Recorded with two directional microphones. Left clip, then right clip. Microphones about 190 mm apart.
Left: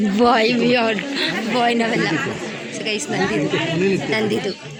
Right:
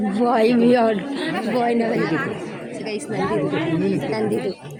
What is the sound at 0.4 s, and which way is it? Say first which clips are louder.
Speech: right 1 dB; 30° right (ahead or behind).